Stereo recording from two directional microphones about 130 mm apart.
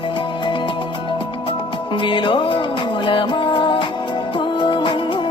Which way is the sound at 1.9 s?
40° left (ahead or behind).